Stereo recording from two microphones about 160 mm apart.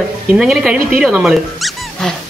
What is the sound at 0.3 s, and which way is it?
A man's voice, 5° right (ahead or behind).